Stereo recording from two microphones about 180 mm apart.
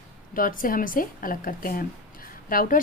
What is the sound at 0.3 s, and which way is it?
A woman's voice, 50° left (ahead or behind).